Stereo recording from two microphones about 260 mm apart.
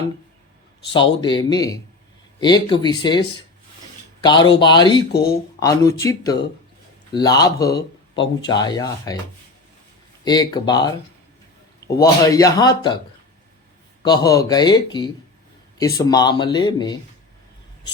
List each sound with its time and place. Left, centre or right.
0.9 s speech: centre
4.2 s speech: centre
7.7 s a man's voice: left
8.4 s speech: centre
10.2 s speech: centre
11.9 s speech: centre
14.0 s speech: centre